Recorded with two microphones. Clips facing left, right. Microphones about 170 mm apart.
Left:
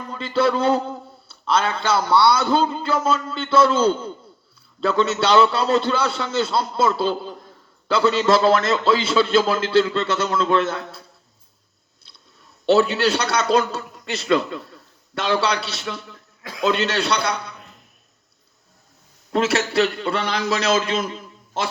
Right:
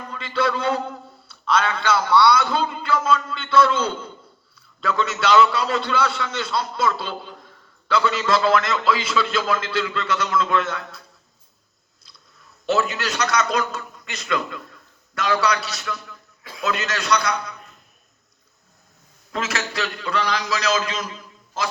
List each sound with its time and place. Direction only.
0.1 s a man's voice: 30° left (ahead or behind)
12.6 s a man's voice: 30° left (ahead or behind)
16.4 s a sound: 90° left
16.6 s a man's voice: 30° left (ahead or behind)
19.3 s a man's voice: 30° left (ahead or behind)